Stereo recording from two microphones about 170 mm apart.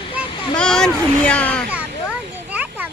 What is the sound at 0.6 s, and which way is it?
Speech, 5° left (ahead or behind).